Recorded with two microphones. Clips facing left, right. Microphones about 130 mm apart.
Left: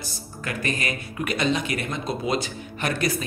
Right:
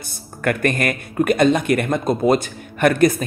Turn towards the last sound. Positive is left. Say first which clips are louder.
# right 10 dB
turn(degrees=-50)  # may be behind; listen again after turning